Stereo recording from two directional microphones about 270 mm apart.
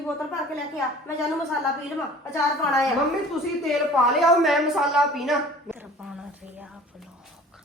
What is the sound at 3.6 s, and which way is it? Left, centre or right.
A woman's voice, centre.